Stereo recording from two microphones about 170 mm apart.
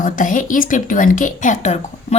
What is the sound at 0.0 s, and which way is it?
A woman's voice, 50° left (ahead or behind).